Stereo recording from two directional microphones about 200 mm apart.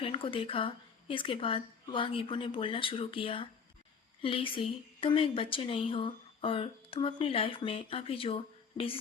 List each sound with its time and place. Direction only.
0.0 s a woman's voice: 25° left (ahead or behind)